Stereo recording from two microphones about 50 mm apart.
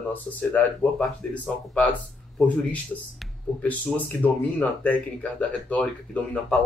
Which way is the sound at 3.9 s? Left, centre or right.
Left.